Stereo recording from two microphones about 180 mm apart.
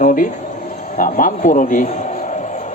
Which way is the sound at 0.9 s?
50° left (ahead or behind).